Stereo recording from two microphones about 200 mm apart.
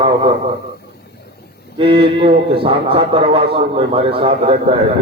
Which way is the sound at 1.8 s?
25° right (ahead or behind).